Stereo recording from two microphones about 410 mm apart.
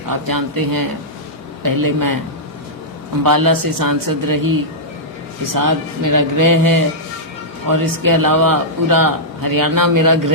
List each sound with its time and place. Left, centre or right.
0.1 s a man's voice: right
3.2 s a man's voice: right